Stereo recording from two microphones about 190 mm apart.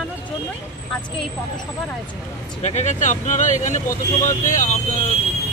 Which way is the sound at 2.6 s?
35° left (ahead or behind).